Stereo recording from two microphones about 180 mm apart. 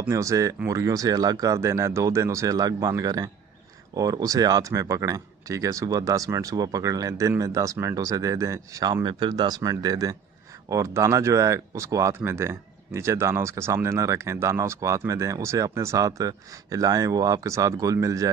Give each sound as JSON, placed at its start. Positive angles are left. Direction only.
{"t": 0.0, "sound": "speech", "side_deg": -15}